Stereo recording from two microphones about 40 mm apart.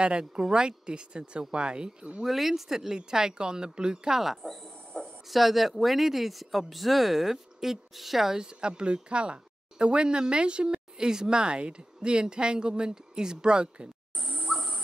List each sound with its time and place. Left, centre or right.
0.2 s speech: right
2.2 s speech: centre
4.2 s speech: centre
8.4 s speech: right